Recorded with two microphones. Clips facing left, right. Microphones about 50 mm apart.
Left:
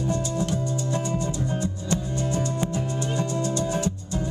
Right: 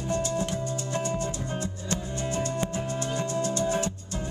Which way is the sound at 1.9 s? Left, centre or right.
Right.